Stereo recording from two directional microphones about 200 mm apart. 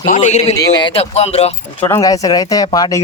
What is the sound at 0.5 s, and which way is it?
Speech, 20° left (ahead or behind).